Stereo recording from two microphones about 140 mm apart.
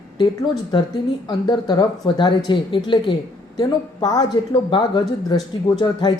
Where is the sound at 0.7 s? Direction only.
35° left (ahead or behind).